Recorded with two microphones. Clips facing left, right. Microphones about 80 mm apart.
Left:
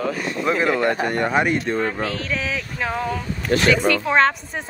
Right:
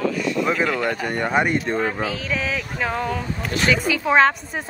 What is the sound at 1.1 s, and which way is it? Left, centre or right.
A woman's voice, centre.